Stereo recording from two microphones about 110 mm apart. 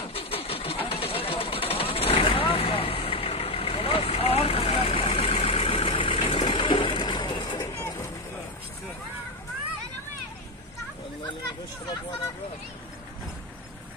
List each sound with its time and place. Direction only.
0.1 s vehicle: 60° left (ahead or behind); by 7.6 s 45° left (ahead or behind)
7.7 s vehicle: 25° left (ahead or behind)